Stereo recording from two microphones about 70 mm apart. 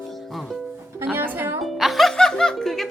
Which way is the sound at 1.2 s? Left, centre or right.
Right.